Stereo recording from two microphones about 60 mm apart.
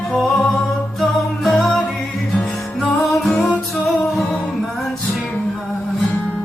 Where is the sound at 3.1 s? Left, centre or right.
Centre.